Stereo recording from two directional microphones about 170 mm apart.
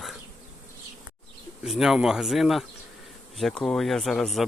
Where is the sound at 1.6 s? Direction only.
Centre (ahead or behind).